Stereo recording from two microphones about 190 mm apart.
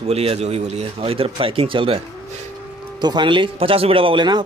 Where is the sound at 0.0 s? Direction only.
30° right (ahead or behind).